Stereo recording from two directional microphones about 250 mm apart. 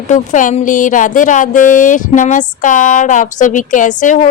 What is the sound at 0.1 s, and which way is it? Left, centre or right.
A woman's voice, left.